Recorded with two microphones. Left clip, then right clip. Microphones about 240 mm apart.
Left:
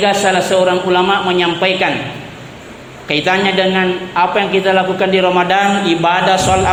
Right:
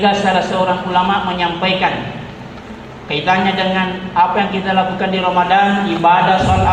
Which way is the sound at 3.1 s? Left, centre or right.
Left.